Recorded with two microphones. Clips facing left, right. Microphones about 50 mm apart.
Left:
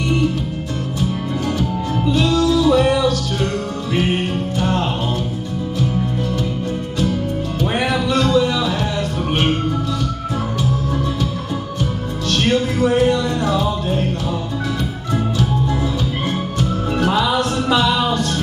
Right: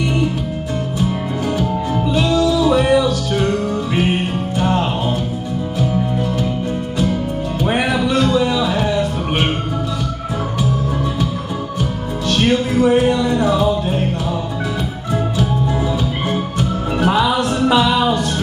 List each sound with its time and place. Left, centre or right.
2.1 s music: centre
7.6 s music: centre
12.3 s music: centre
16.3 s music: centre